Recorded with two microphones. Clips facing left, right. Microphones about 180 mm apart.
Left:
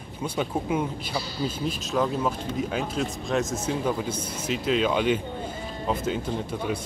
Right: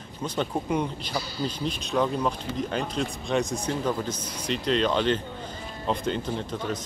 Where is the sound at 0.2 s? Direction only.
5° left (ahead or behind).